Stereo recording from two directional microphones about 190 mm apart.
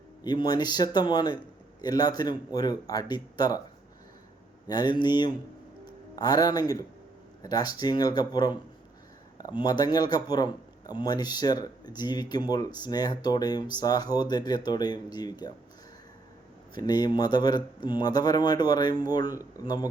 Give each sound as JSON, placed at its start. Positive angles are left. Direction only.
{"t": 0.2, "sound": "speech", "side_deg": 20}
{"t": 4.7, "sound": "speech", "side_deg": 25}
{"t": 16.7, "sound": "speech", "side_deg": 20}